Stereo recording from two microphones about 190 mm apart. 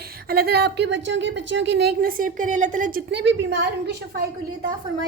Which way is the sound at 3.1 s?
65° right (ahead or behind).